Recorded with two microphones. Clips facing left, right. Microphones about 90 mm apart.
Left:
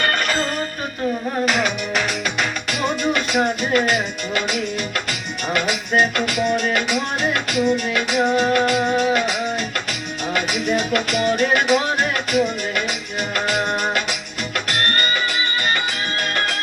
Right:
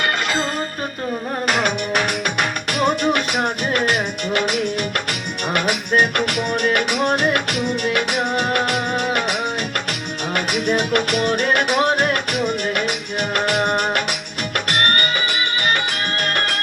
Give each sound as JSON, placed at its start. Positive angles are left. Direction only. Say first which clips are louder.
{"t": 0.0, "sound": "music", "louder": "left 1 dB", "side_deg": -15}
{"t": 1.5, "sound": "music", "louder": "right 4 dB", "side_deg": -50}